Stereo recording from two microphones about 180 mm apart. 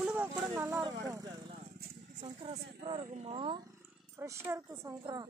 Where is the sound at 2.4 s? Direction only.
30° right (ahead or behind).